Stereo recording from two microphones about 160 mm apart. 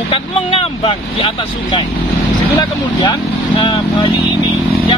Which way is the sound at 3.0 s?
30° left (ahead or behind).